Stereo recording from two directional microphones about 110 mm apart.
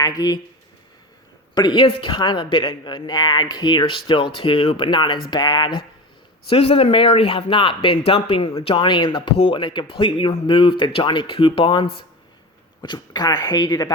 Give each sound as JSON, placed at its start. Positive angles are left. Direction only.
{"t": 0.0, "sound": "speech", "side_deg": 35}
{"t": 1.5, "sound": "a man's voice", "side_deg": 45}
{"t": 6.5, "sound": "a man's voice", "side_deg": 60}